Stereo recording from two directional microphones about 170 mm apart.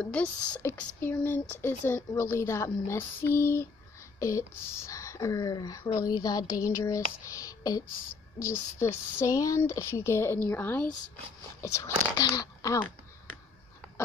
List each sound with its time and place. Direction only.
0.0 s speech: 5° left (ahead or behind)